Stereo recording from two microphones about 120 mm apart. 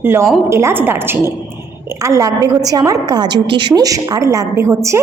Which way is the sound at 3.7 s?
30° right (ahead or behind).